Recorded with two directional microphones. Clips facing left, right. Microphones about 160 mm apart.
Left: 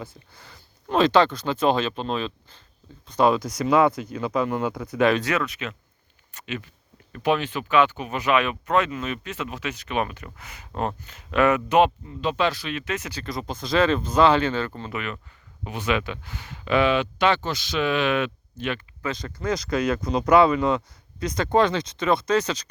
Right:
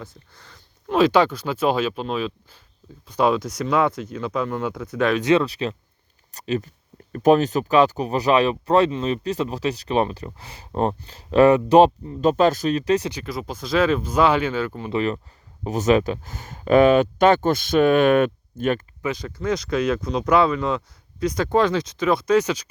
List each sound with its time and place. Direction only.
0.0 s speech: 5° left (ahead or behind)
0.9 s speech: 10° right (ahead or behind)
3.4 s speech: 5° left (ahead or behind)
5.2 s speech: 30° right (ahead or behind)
13.2 s speech: 5° right (ahead or behind)
14.9 s speech: 35° right (ahead or behind)
19.0 s speech: 10° right (ahead or behind)